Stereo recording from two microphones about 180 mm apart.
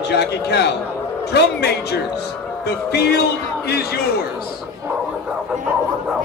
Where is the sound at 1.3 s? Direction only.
65° left (ahead or behind).